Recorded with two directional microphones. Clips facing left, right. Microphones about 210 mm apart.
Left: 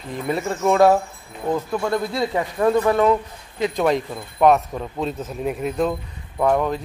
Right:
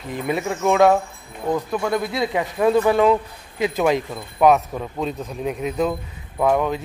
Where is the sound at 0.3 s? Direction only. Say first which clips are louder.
Even; centre (ahead or behind).